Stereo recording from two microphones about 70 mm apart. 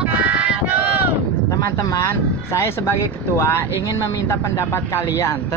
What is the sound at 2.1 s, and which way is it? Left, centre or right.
Speech, left.